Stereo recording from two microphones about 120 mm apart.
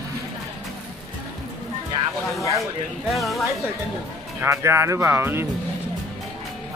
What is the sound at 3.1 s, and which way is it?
Speech, centre (ahead or behind).